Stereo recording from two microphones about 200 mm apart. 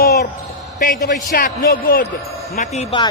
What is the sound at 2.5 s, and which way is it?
Speech, 35° left (ahead or behind).